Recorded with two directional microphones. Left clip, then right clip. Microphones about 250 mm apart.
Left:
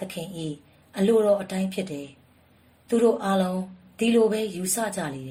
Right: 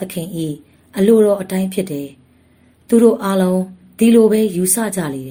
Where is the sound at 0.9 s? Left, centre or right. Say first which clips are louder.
Right 8 dB; right.